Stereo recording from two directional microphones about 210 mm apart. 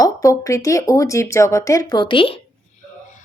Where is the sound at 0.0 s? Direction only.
15° left (ahead or behind).